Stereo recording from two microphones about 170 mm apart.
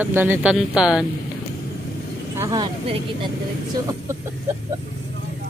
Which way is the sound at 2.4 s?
25° right (ahead or behind).